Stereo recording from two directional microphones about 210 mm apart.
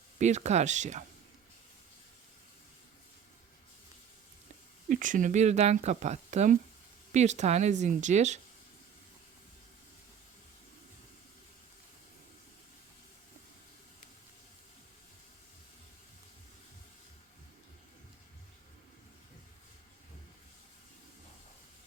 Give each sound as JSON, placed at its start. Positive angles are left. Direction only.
{"t": 0.2, "sound": "speech", "side_deg": -35}
{"t": 4.9, "sound": "speech", "side_deg": -40}